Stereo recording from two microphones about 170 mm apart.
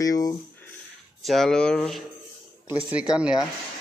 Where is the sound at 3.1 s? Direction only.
5° right (ahead or behind).